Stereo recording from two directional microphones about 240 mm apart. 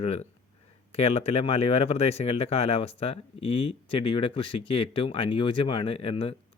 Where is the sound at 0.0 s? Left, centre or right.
Left.